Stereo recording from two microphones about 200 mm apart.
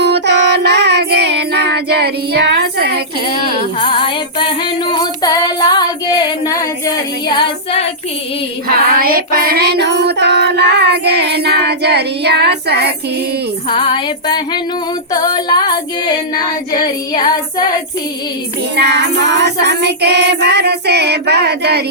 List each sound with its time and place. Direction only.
0.0 s child singing: 55° right (ahead or behind)
3.8 s female singing: 25° left (ahead or behind)
8.6 s music: 45° right (ahead or behind)
13.7 s music: 25° left (ahead or behind)
18.8 s music: 55° right (ahead or behind)